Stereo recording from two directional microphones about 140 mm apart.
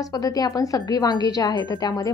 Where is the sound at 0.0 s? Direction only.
25° left (ahead or behind).